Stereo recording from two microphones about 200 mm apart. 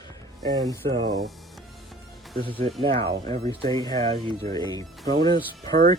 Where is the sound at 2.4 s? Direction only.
25° right (ahead or behind).